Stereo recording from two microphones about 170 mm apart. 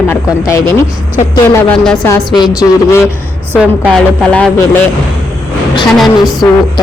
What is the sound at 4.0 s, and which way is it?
Speech, 5° left (ahead or behind).